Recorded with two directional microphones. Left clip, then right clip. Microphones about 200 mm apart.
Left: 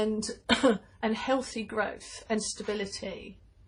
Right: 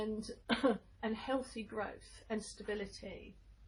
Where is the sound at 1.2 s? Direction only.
25° left (ahead or behind).